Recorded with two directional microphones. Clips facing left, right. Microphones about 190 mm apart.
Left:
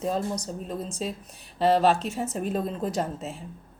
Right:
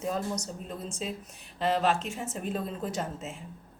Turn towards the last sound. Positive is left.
turn(degrees=35)  # may be behind; listen again after turning